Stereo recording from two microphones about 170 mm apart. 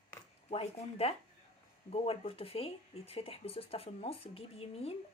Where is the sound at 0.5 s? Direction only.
35° left (ahead or behind).